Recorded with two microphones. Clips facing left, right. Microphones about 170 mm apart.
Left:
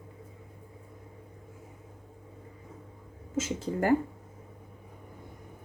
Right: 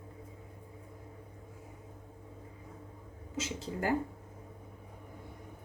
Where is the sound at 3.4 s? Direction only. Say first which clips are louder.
Left 7 dB; 50° left (ahead or behind).